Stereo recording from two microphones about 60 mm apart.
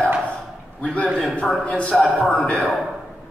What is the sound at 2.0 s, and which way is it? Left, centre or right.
Speech, centre.